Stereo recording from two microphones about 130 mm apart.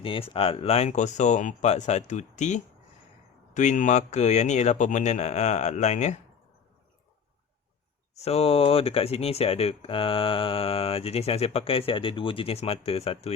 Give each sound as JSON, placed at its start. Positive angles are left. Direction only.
{"t": 0.0, "sound": "a man's voice", "side_deg": 45}
{"t": 8.2, "sound": "speech", "side_deg": 50}